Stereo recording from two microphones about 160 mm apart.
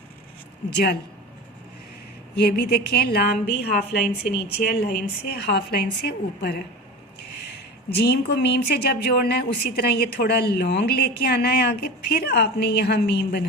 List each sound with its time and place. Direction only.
0.7 s speech: 90° left
2.3 s a woman's voice: 80° left
3.6 s a woman's voice: 90° left
7.9 s speech: 90° left